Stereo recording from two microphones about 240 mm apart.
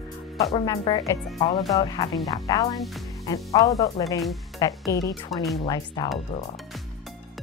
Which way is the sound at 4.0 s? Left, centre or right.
Centre.